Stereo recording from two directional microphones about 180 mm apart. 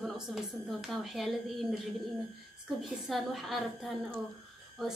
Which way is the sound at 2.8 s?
Centre (ahead or behind).